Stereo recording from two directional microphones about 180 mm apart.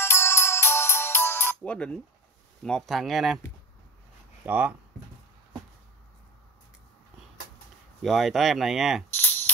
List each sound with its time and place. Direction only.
0.0 s music: 15° left (ahead or behind)
2.6 s speech: centre (ahead or behind)
4.5 s speech: 10° right (ahead or behind)
8.0 s speech: centre (ahead or behind)